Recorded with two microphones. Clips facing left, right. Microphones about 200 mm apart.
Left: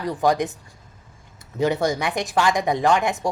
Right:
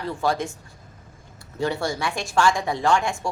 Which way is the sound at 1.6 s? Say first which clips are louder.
Left 4 dB; 20° left (ahead or behind).